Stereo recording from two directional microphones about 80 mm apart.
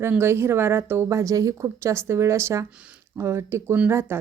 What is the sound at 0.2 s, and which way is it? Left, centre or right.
Speech, right.